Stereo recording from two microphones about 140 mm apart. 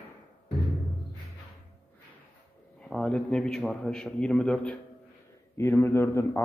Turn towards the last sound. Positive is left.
turn(degrees=15)  # may be behind; listen again after turning